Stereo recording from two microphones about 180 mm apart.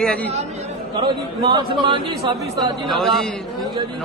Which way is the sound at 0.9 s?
25° right (ahead or behind).